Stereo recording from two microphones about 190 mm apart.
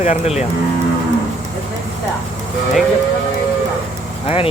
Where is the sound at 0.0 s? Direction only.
35° left (ahead or behind).